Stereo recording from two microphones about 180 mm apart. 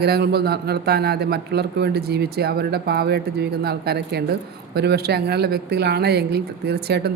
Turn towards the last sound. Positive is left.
turn(degrees=-65)  # may be behind; listen again after turning